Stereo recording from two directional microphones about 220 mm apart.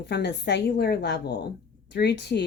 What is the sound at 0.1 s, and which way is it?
A woman's voice, 50° left (ahead or behind).